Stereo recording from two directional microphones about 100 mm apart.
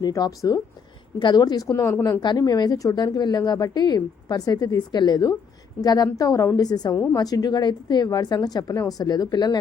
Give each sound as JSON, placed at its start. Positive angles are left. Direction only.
{"t": 0.0, "sound": "a woman's voice", "side_deg": 40}
{"t": 1.7, "sound": "a woman's voice", "side_deg": 30}
{"t": 2.2, "sound": "a woman's voice", "side_deg": 45}
{"t": 6.9, "sound": "speech", "side_deg": 20}
{"t": 7.2, "sound": "a woman's voice", "side_deg": 40}